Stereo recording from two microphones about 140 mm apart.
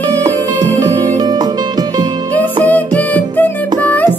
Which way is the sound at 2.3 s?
10° left (ahead or behind).